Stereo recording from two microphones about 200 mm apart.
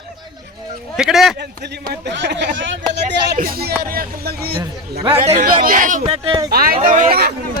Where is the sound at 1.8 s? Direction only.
60° right (ahead or behind).